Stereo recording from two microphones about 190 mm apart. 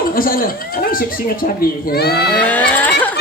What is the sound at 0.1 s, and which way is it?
A man's voice, 50° left (ahead or behind).